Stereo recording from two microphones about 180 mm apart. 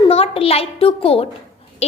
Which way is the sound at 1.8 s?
35° left (ahead or behind).